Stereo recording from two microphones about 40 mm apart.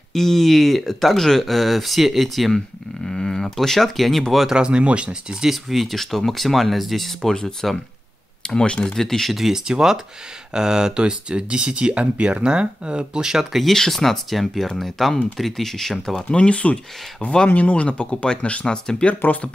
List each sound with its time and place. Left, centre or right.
0.1 s speech: centre
3.1 s a sound: centre
4.5 s speech: right
5.3 s speech: centre
8.4 s speech: left
8.9 s speech: centre
9.3 s speech: centre
13.7 s speech: centre
16.3 s speech: left
17.5 s speech: left
17.8 s speech: left